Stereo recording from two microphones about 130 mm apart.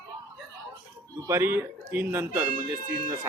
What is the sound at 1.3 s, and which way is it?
Speech, 15° right (ahead or behind).